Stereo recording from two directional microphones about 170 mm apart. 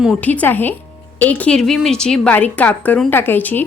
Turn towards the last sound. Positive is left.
turn(degrees=10)  # may be behind; listen again after turning